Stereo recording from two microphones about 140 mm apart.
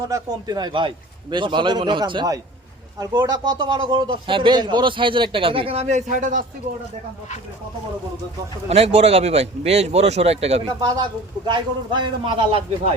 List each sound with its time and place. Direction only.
0.0 s a man's voice: 25° right (ahead or behind); by 6.4 s 65° right (ahead or behind)
8.7 s speech: 45° right (ahead or behind)
10.7 s a man's voice: 30° right (ahead or behind)